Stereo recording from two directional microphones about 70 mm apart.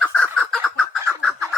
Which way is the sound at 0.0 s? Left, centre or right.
Centre.